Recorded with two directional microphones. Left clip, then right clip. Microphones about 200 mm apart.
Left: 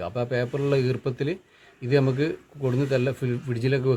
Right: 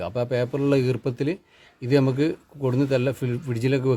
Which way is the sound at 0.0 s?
55° right (ahead or behind).